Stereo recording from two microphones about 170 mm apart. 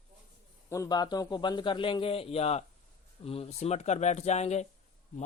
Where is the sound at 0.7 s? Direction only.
20° left (ahead or behind).